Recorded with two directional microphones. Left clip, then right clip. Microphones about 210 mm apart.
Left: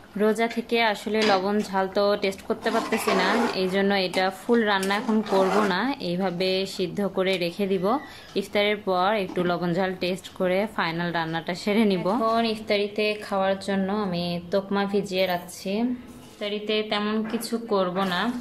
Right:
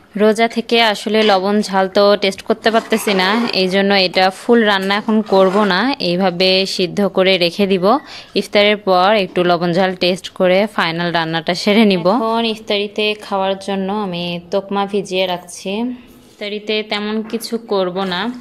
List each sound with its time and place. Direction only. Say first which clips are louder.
0.2 s a woman's voice: right 10 dB; 40° right (ahead or behind)